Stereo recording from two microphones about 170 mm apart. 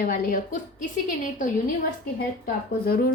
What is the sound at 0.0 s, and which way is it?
A woman's voice, 60° left (ahead or behind).